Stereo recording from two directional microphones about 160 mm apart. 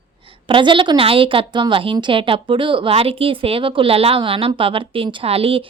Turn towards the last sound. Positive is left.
turn(degrees=-35)  # may be behind; listen again after turning